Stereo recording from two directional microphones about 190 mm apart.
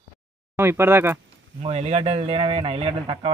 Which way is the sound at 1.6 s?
30° right (ahead or behind).